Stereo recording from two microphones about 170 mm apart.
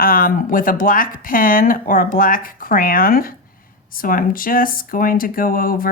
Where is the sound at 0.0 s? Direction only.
55° left (ahead or behind).